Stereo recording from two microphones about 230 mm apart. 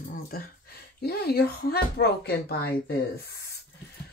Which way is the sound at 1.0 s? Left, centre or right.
Left.